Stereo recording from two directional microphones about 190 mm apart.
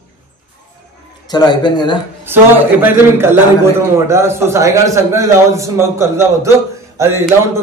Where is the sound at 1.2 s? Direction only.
20° left (ahead or behind).